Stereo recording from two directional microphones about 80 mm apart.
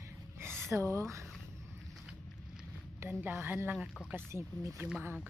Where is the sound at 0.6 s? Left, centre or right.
Right.